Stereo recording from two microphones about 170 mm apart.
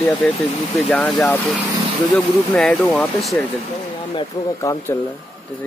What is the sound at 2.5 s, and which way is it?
Speech, 5° left (ahead or behind).